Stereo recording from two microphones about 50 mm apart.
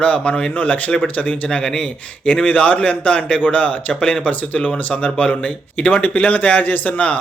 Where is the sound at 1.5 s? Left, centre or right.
Centre.